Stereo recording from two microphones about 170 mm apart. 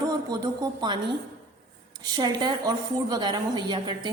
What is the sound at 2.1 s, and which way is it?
A woman's voice, 25° right (ahead or behind).